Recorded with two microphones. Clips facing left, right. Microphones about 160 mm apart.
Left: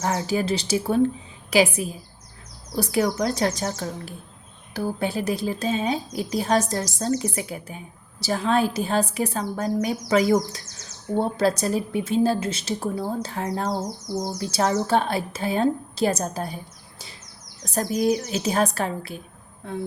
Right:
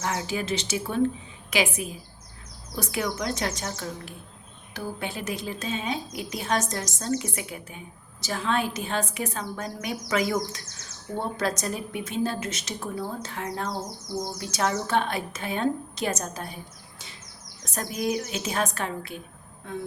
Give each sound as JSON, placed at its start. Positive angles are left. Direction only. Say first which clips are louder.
{"t": 0.0, "sound": "speech", "louder": "left 5 dB", "side_deg": 35}
{"t": 17.7, "sound": "speech", "louder": "left 6 dB", "side_deg": 35}